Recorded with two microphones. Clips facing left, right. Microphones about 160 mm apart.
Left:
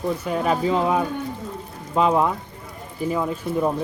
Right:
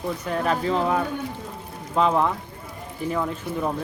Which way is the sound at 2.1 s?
10° left (ahead or behind).